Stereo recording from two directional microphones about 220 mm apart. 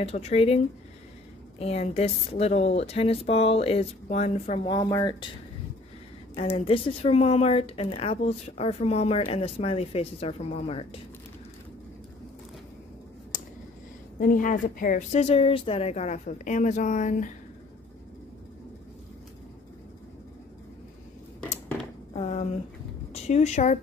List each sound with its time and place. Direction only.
0.0 s speech: 25° left (ahead or behind)
1.6 s speech: 30° left (ahead or behind)
4.6 s speech: 20° left (ahead or behind)
6.5 s speech: 25° left (ahead or behind)
14.2 s speech: 40° left (ahead or behind)
22.1 s a sound: 30° left (ahead or behind)
23.2 s speech: 30° left (ahead or behind)